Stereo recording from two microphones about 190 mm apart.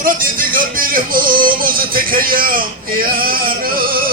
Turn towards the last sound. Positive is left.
turn(degrees=-50)  # may be behind; listen again after turning